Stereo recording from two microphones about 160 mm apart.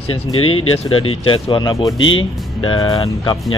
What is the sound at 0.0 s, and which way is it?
Speech, 35° left (ahead or behind).